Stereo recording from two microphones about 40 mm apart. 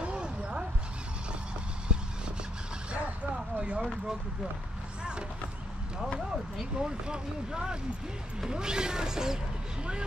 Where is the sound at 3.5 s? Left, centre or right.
Right.